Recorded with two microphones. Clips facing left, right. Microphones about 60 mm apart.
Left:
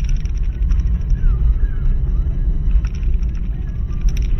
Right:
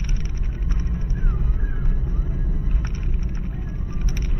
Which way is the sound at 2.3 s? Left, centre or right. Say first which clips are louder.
Left 1 dB; right.